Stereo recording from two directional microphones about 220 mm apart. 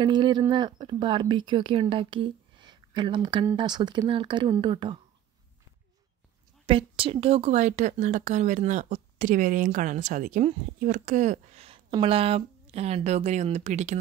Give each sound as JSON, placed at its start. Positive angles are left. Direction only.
{"t": 0.0, "sound": "speech", "side_deg": -20}
{"t": 6.6, "sound": "a woman's voice", "side_deg": -25}